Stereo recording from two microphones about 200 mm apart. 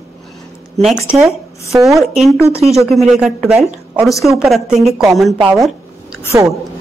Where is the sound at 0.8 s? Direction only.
5° right (ahead or behind).